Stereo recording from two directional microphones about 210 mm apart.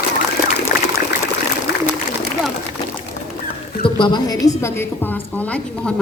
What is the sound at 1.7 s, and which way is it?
Pigeon, 50° left (ahead or behind).